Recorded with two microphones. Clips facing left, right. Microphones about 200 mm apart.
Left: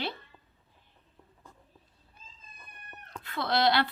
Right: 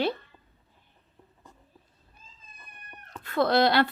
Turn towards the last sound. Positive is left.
turn(degrees=-45)  # may be behind; listen again after turning